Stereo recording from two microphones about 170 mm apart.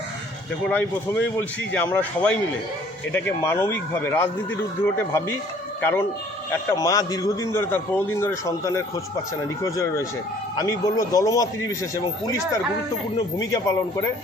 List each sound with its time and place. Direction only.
0.7 s a man's voice: 10° left (ahead or behind)
5.8 s a man's voice: 15° left (ahead or behind)